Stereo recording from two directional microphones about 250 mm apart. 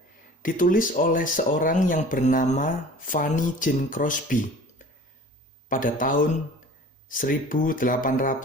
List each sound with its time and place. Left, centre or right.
0.4 s speech: left
5.6 s speech: left